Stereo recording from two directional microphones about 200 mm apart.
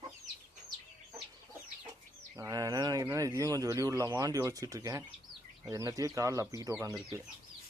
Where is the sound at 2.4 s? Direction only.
15° right (ahead or behind).